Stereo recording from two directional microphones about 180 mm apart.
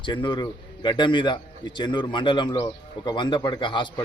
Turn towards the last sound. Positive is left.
turn(degrees=25)  # may be behind; listen again after turning